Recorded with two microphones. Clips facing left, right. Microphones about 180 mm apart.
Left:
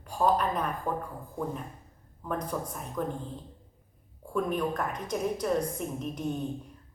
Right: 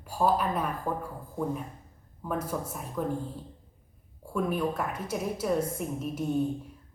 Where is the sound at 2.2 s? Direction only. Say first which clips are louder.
Right 1 dB; 5° right (ahead or behind).